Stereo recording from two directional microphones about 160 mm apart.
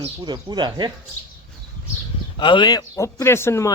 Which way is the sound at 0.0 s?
25° right (ahead or behind).